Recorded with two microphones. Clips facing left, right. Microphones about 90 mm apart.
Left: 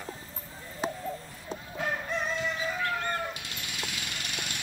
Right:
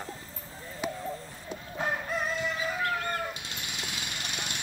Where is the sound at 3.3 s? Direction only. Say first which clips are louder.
Even; 25° right (ahead or behind).